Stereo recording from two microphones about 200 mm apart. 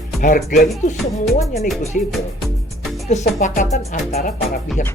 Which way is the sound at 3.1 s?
35° left (ahead or behind).